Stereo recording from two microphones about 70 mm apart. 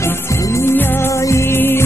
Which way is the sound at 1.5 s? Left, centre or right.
Left.